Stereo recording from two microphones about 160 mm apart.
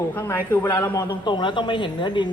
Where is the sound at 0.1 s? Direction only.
10° left (ahead or behind).